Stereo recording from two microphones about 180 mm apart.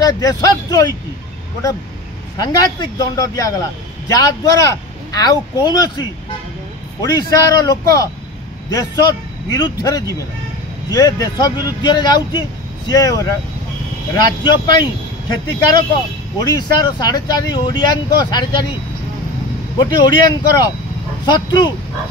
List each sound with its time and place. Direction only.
0.0 s speech: 20° left (ahead or behind)
3.0 s speech: 20° left (ahead or behind)
19.8 s speech: 25° left (ahead or behind)